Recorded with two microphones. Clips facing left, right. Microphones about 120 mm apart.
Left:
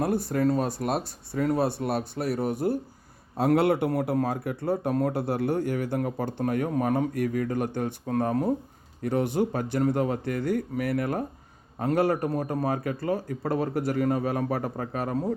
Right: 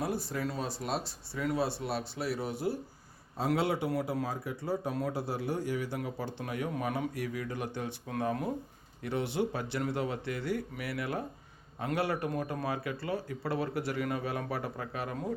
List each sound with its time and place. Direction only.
0.0 s speech: 55° left (ahead or behind); by 15.3 s 40° left (ahead or behind)